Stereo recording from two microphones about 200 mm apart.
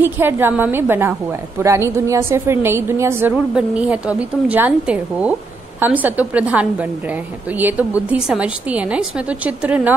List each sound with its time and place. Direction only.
0.0 s a woman's voice: 10° right (ahead or behind)